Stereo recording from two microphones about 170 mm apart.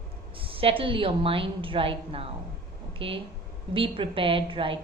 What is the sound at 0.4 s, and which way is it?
A woman's voice, 30° right (ahead or behind).